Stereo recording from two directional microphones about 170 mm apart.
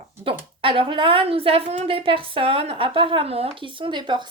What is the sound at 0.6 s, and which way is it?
A woman's voice, 30° right (ahead or behind).